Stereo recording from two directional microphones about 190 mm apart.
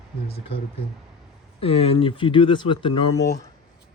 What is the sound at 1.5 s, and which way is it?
Speech, 30° left (ahead or behind).